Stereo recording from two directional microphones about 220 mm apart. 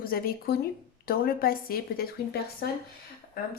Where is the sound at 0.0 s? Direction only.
40° left (ahead or behind).